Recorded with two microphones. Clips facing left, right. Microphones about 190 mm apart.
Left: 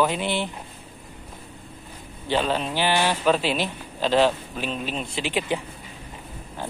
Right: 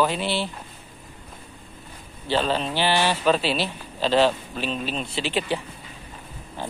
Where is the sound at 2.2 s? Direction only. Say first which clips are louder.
Even; 10° left (ahead or behind).